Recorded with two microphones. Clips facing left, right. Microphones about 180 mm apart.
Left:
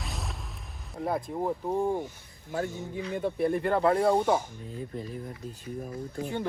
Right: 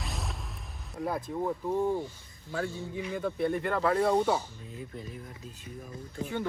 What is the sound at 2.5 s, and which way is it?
Speech, 15° left (ahead or behind).